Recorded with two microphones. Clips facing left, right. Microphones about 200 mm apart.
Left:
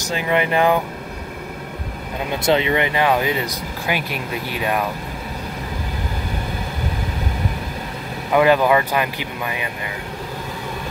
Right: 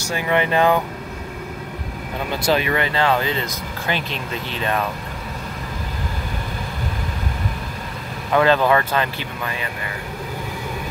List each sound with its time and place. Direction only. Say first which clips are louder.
0.0 s speech: even; 15° left (ahead or behind)
2.4 s speech: left 2 dB; 25° left (ahead or behind)
8.3 s speech: left 1 dB; 15° left (ahead or behind)